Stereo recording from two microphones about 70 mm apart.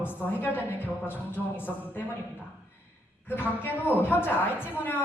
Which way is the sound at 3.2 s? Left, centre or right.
Left.